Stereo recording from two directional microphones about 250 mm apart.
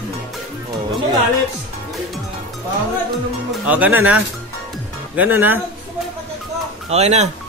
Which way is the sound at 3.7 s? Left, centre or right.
Centre.